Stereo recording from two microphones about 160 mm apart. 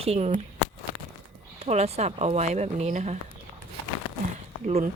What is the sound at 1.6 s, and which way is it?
Speech, 40° right (ahead or behind).